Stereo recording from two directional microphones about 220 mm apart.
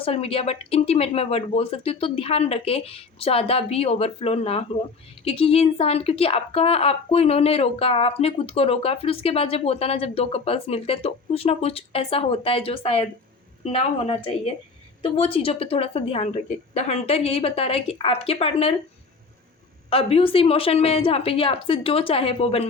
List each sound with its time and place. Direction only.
0.0 s a woman's voice: 25° left (ahead or behind)
19.9 s a woman's voice: 25° left (ahead or behind)